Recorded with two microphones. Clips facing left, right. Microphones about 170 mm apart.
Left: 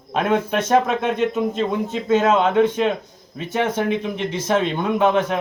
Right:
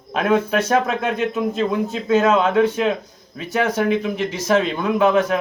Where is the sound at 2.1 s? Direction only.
25° left (ahead or behind).